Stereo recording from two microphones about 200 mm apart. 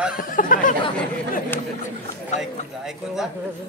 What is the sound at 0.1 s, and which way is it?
Speech, 45° left (ahead or behind).